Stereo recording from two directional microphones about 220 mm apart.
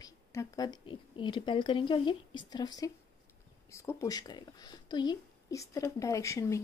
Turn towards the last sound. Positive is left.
turn(degrees=15)  # may be behind; listen again after turning